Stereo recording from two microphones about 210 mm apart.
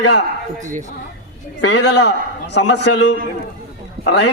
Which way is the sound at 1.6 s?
55° left (ahead or behind).